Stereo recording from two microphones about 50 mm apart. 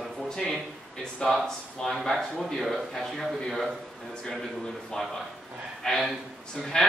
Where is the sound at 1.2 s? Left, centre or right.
Centre.